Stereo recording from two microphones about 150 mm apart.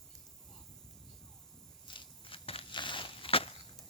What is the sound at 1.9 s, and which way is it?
Walk, 35° left (ahead or behind).